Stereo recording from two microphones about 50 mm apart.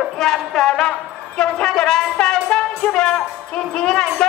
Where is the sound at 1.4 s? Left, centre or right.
Centre.